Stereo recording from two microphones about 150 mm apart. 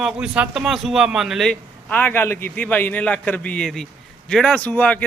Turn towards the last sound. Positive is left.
turn(degrees=10)  # may be behind; listen again after turning